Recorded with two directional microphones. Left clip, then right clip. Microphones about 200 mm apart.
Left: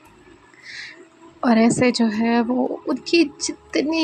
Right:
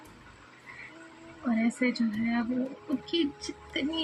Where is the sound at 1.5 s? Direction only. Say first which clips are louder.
Left 12 dB; 30° left (ahead or behind).